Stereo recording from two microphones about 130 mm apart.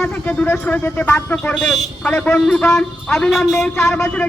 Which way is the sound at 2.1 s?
10° left (ahead or behind).